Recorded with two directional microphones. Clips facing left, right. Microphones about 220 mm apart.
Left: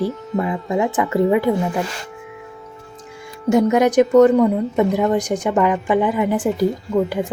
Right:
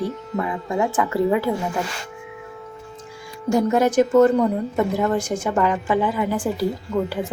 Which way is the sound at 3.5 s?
15° left (ahead or behind).